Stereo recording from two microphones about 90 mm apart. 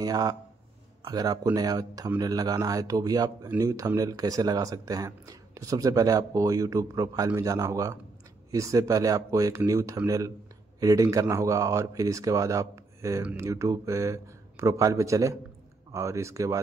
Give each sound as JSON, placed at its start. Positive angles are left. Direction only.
{"t": 0.0, "sound": "a man's voice", "side_deg": -45}